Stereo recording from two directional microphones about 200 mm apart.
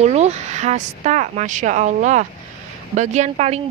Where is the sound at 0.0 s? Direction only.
35° right (ahead or behind).